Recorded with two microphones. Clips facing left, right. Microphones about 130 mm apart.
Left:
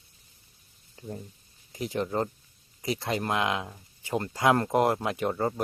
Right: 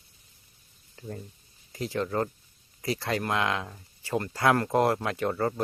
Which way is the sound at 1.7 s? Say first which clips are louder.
Even; 20° left (ahead or behind).